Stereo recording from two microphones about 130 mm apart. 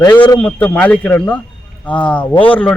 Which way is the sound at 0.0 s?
15° left (ahead or behind).